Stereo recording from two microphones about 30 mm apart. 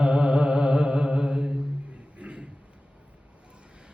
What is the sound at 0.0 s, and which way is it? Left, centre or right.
Mantra, right.